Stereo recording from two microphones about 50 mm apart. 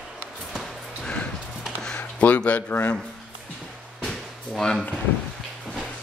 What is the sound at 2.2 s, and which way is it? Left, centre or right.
Speech, left.